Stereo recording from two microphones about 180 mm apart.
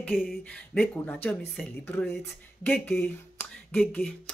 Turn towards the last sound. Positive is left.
turn(degrees=10)  # may be behind; listen again after turning